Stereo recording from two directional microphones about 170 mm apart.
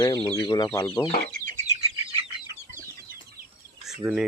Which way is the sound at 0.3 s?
25° left (ahead or behind).